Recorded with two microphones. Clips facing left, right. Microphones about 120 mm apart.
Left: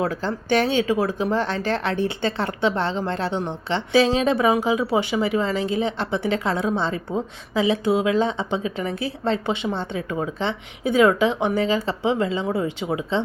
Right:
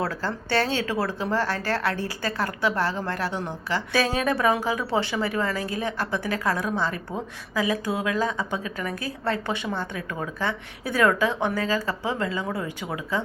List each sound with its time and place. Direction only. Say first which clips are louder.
0.0 s speech: left 4 dB; 15° left (ahead or behind)